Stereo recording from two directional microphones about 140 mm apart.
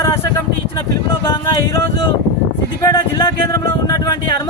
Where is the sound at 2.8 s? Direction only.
25° left (ahead or behind).